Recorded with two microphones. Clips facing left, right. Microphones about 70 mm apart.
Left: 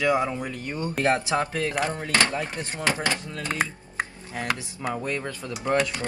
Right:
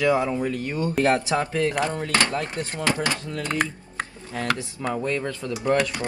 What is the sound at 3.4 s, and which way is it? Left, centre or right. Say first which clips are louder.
Speech: right 2 dB; centre.